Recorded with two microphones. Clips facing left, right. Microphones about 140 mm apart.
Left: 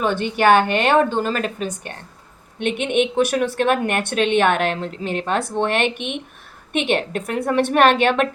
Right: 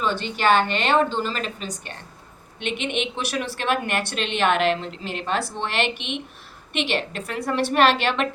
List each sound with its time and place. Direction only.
0.0 s a woman's voice: 55° left (ahead or behind)